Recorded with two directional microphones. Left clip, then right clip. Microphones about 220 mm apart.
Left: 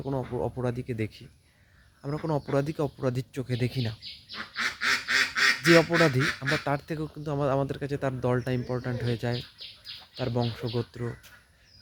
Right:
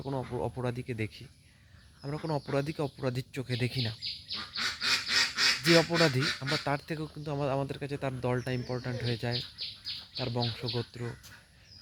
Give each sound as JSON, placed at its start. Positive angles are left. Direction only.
{"t": 0.0, "sound": "speech", "side_deg": 5}
{"t": 4.3, "sound": "quack", "side_deg": 20}
{"t": 6.1, "sound": "speech", "side_deg": 15}
{"t": 6.7, "sound": "speech", "side_deg": 5}